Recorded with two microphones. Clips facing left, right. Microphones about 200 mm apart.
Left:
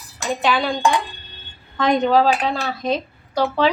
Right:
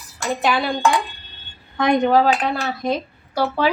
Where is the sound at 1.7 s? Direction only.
10° right (ahead or behind).